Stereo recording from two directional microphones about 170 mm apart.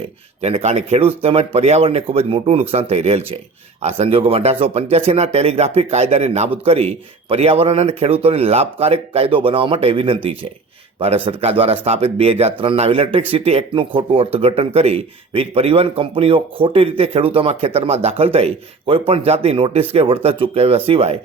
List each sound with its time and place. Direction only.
0.4 s speech: 40° right (ahead or behind)